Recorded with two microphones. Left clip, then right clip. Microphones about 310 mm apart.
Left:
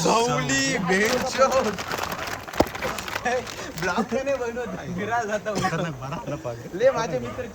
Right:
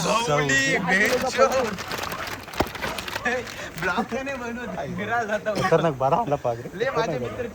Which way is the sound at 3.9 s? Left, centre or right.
Left.